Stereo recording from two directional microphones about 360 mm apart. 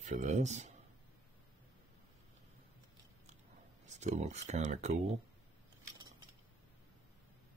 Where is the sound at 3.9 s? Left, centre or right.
Centre.